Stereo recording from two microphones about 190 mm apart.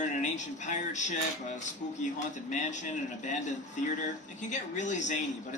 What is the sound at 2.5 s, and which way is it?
Speech, 40° left (ahead or behind).